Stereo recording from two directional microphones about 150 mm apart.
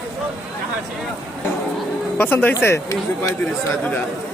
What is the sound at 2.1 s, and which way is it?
Speech, 15° left (ahead or behind).